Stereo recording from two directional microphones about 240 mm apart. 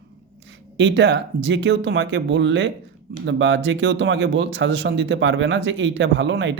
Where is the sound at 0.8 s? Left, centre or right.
Right.